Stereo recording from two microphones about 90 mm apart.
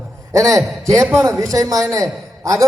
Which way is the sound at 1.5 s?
40° right (ahead or behind).